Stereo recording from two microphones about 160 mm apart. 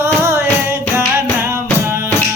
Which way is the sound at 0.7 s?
15° right (ahead or behind).